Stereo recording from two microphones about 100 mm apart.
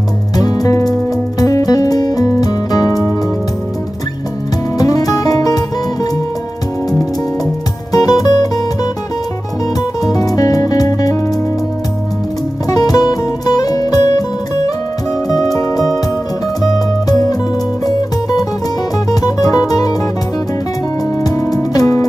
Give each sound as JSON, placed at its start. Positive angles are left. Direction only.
{"t": 0.4, "sound": "music", "side_deg": 40}
{"t": 4.7, "sound": "music", "side_deg": 40}
{"t": 7.9, "sound": "music", "side_deg": 40}
{"t": 10.0, "sound": "music", "side_deg": 40}
{"t": 12.6, "sound": "music", "side_deg": 40}
{"t": 15.2, "sound": "music", "side_deg": 40}
{"t": 19.0, "sound": "music", "side_deg": 40}
{"t": 21.2, "sound": "music", "side_deg": 35}